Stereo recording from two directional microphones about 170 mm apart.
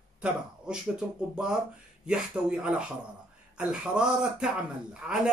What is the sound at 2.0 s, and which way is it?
Speech, 5° right (ahead or behind).